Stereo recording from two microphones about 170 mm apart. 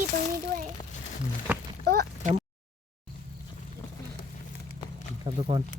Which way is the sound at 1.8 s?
70° right (ahead or behind).